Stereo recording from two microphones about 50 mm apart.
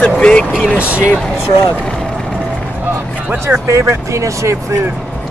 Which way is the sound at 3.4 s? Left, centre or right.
Right.